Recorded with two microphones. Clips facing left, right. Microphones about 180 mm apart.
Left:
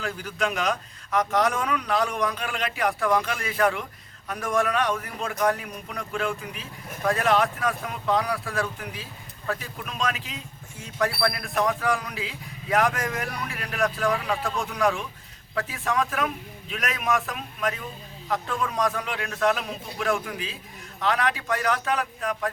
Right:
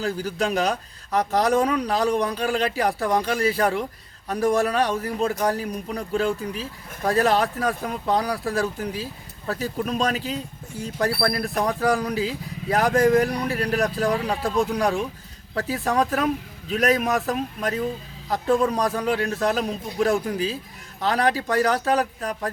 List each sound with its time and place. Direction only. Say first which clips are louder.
0.0 s speech: right 4 dB; 35° right (ahead or behind)